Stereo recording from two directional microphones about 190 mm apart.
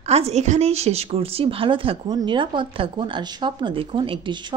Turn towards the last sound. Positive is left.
turn(degrees=-25)  # may be behind; listen again after turning